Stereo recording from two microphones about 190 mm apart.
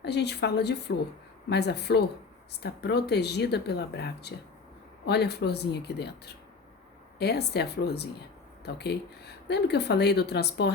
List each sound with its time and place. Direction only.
0.0 s speech: 60° left (ahead or behind)